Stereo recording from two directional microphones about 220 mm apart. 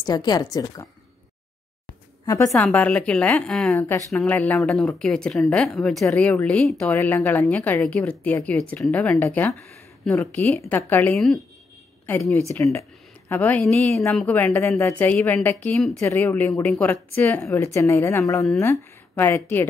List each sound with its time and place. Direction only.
0.0 s a woman's voice: 20° left (ahead or behind)
2.2 s a woman's voice: 15° left (ahead or behind)